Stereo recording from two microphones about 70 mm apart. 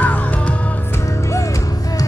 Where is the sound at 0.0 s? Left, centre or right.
Left.